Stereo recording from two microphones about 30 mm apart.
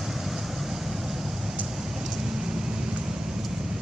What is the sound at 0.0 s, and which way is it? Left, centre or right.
Vehicle, centre.